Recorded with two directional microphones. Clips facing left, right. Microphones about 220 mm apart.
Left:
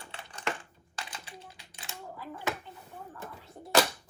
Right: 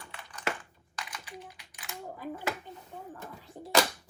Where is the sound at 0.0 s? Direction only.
30° left (ahead or behind).